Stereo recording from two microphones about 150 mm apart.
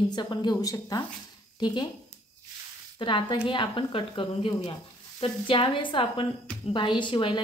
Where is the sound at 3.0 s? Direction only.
35° left (ahead or behind).